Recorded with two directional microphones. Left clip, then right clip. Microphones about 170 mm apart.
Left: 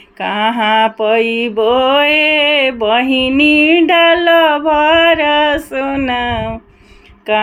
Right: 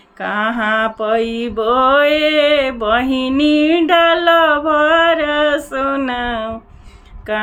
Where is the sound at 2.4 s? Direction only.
30° right (ahead or behind).